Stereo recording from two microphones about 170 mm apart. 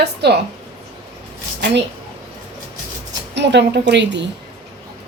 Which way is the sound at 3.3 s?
90° right.